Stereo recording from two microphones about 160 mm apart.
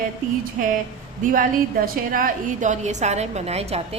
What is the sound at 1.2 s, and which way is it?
A woman's voice, 60° right (ahead or behind).